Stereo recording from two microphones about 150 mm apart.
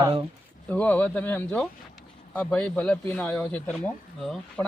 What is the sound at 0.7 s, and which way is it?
Speech, 10° left (ahead or behind).